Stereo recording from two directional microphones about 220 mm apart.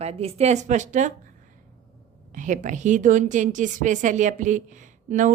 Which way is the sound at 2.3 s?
35° right (ahead or behind).